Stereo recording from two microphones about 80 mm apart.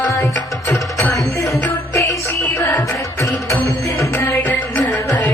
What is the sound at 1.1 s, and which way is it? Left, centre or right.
Music, left.